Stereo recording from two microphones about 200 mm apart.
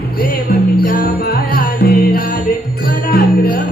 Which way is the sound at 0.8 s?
45° left (ahead or behind).